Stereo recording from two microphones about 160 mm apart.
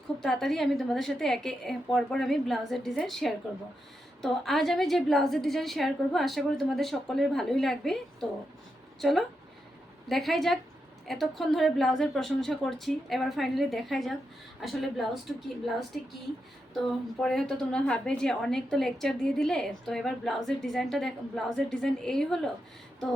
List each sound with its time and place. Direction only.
0.2 s a woman's voice: centre (ahead or behind)
17.2 s a woman's voice: centre (ahead or behind)